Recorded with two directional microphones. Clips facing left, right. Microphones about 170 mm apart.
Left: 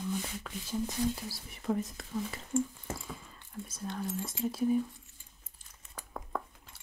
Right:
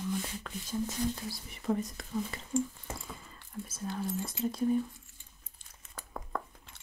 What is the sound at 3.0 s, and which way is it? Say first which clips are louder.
Whispering: left 2 dB; centre (ahead or behind).